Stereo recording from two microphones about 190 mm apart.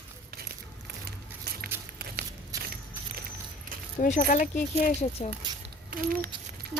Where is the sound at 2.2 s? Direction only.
55° right (ahead or behind).